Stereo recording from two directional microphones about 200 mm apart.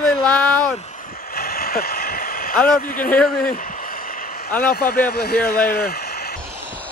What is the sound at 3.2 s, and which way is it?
Speech, 45° left (ahead or behind).